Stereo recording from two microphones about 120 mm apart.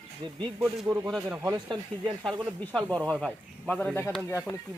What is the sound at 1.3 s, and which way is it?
Speech, 20° right (ahead or behind).